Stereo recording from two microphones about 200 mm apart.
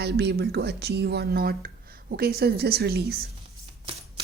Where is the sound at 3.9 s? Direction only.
25° right (ahead or behind).